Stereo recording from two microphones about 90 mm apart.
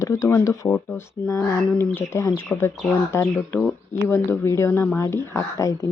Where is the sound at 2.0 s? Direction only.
30° left (ahead or behind).